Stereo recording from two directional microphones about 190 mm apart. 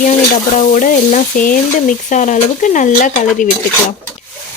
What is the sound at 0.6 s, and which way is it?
Speech, 40° left (ahead or behind).